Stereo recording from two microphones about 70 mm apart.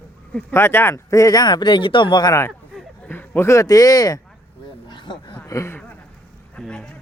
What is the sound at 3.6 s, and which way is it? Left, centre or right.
Speech, left.